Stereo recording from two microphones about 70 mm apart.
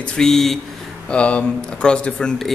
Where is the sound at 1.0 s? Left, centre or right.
Centre.